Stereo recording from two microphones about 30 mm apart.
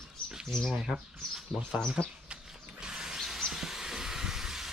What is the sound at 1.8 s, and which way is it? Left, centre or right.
Speech, left.